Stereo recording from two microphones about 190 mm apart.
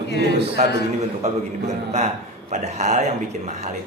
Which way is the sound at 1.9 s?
35° right (ahead or behind).